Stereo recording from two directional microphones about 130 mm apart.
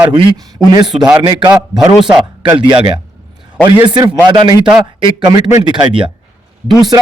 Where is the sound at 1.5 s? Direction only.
5° right (ahead or behind).